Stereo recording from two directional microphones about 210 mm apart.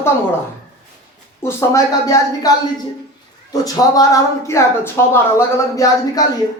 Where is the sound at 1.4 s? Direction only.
10° left (ahead or behind).